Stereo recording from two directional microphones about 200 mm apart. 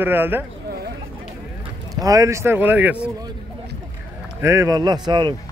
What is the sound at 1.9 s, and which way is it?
Speech, 15° right (ahead or behind).